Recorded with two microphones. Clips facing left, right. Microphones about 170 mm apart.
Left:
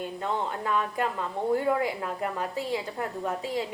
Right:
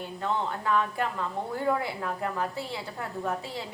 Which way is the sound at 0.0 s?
20° left (ahead or behind).